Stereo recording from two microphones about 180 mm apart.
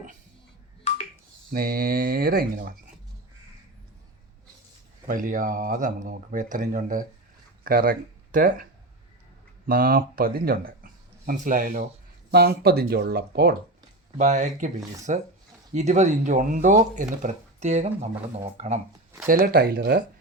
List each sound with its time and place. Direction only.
1.5 s speech: 55° right (ahead or behind)
5.0 s speech: 50° right (ahead or behind)
9.6 s speech: 55° right (ahead or behind)
14.2 s speech: 45° right (ahead or behind)
19.5 s speech: 60° right (ahead or behind)